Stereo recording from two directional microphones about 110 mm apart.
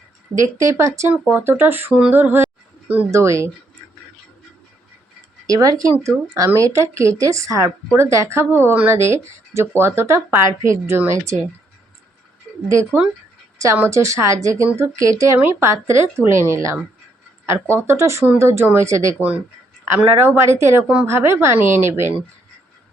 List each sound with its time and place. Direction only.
0.3 s speech: 25° right (ahead or behind)
3.1 s speech: 25° right (ahead or behind)
5.5 s speech: 35° right (ahead or behind)
12.6 s speech: 25° right (ahead or behind)
21.1 s speech: 25° right (ahead or behind)